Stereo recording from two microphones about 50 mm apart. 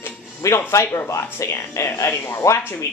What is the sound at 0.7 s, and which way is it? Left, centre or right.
Speech, left.